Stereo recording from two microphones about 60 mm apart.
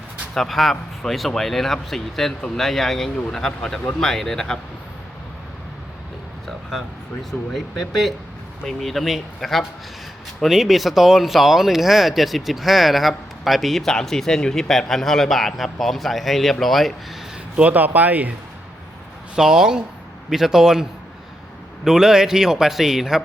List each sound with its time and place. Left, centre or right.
0.3 s speech: centre
7.3 s speech: centre
17.6 s speech: right
19.4 s a man's voice: centre
21.8 s a man's voice: centre